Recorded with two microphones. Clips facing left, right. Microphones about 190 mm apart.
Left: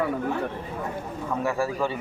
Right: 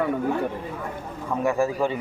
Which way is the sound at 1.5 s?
15° right (ahead or behind).